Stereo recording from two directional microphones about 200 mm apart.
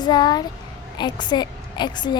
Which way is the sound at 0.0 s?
20° left (ahead or behind).